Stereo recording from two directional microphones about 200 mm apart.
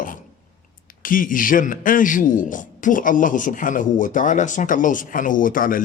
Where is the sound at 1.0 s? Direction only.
45° left (ahead or behind).